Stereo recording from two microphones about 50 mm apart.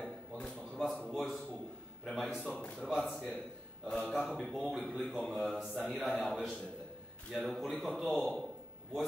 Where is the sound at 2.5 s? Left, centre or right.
Centre.